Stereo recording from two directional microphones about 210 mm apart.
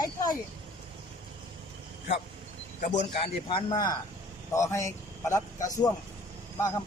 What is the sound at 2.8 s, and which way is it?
A man's voice, 30° left (ahead or behind).